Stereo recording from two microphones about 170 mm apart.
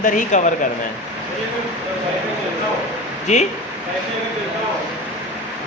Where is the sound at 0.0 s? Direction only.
45° left (ahead or behind).